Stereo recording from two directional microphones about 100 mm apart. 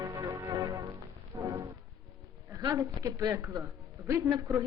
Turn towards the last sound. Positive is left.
turn(degrees=-35)  # may be behind; listen again after turning